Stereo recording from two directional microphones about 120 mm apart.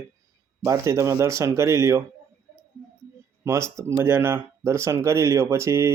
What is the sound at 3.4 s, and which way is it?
Speech, 25° right (ahead or behind).